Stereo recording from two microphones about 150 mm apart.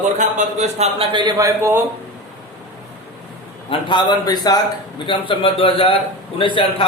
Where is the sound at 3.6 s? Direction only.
30° left (ahead or behind).